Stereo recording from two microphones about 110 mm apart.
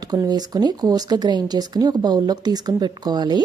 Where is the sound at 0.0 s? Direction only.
35° right (ahead or behind).